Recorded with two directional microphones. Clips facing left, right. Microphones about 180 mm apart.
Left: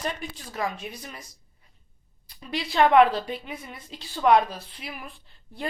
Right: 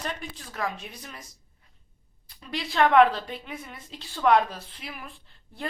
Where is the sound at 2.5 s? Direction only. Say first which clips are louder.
Left 2 dB; 10° left (ahead or behind).